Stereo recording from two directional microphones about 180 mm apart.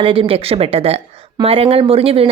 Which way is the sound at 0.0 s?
30° right (ahead or behind).